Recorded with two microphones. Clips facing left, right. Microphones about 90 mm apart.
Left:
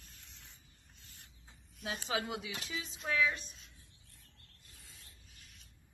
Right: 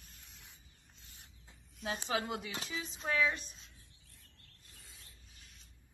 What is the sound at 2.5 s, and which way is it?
Speech, 35° right (ahead or behind).